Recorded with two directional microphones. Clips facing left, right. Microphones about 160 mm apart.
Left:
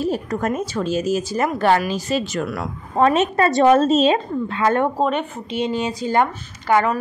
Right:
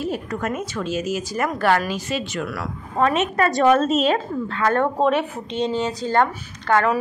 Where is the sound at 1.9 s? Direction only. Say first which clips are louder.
Left 4 dB; 40° left (ahead or behind); by 4.8 s 20° left (ahead or behind).